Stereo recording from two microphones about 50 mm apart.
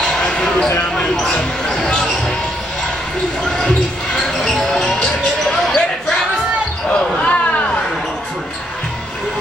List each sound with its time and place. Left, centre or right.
0.3 s a sound: centre
0.9 s speech: centre
3.4 s basketball bounce: centre
6.9 s basketball bounce: left